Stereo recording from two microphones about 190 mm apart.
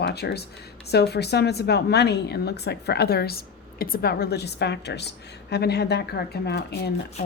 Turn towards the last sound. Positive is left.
turn(degrees=60)  # may be behind; listen again after turning